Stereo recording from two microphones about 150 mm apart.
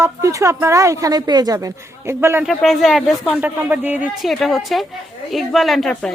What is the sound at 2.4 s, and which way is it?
A woman's voice, centre (ahead or behind).